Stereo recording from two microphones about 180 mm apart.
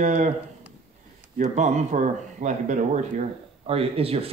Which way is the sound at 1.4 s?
40° right (ahead or behind).